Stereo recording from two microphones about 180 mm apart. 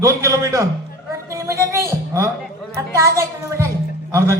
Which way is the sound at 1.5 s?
15° right (ahead or behind).